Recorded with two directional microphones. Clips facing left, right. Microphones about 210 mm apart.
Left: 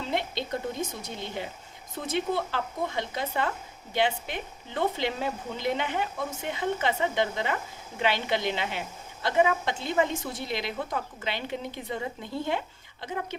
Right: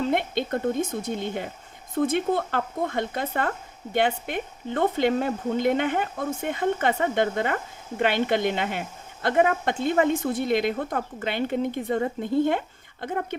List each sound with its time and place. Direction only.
0.1 s speech: 55° right (ahead or behind)